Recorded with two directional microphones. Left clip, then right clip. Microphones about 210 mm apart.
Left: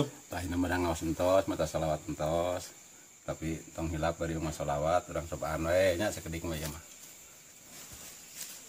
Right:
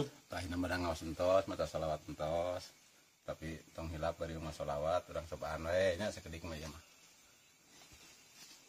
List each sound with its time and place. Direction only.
0.3 s speech: 35° right (ahead or behind)
1.1 s speech: 20° right (ahead or behind)